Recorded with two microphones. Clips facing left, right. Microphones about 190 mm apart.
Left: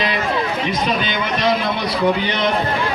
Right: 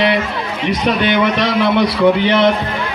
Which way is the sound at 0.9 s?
65° right (ahead or behind).